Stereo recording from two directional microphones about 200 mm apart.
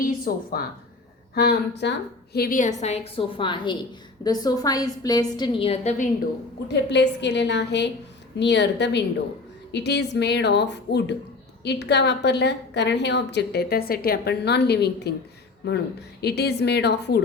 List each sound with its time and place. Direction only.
0.0 s a woman's voice: 50° left (ahead or behind); by 6.1 s 30° left (ahead or behind)
6.9 s a woman's voice: 60° left (ahead or behind)